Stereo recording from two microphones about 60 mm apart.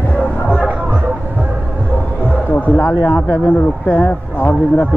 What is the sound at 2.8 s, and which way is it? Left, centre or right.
Speech, left.